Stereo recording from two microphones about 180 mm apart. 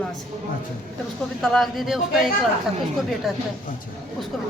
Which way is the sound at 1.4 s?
Centre (ahead or behind).